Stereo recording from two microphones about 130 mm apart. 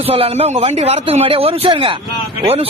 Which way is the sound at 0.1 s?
50° right (ahead or behind).